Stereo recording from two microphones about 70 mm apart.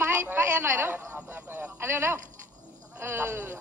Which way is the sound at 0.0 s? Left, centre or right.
Right.